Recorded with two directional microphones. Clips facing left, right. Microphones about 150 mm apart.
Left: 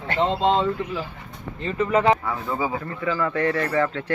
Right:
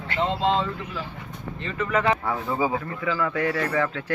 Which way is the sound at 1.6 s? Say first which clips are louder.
Left 4 dB; 35° left (ahead or behind).